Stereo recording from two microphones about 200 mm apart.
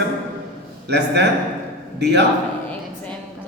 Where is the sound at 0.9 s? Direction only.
55° right (ahead or behind).